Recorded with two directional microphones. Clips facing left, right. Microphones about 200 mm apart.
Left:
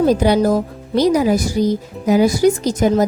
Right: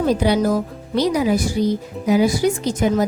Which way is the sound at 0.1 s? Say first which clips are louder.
Left 3 dB; 45° left (ahead or behind).